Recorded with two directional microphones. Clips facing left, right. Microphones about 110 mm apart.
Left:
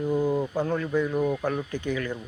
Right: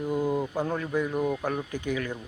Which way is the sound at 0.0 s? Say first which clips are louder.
Left 2 dB; 10° right (ahead or behind).